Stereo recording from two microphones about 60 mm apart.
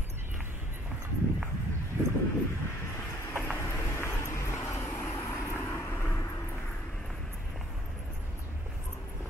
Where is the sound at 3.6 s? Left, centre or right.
Left.